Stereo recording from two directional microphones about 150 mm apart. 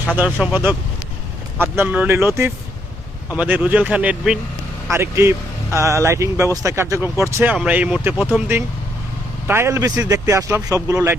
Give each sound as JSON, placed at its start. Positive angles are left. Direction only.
{"t": 0.4, "sound": "speech", "side_deg": -10}
{"t": 9.5, "sound": "speech", "side_deg": -15}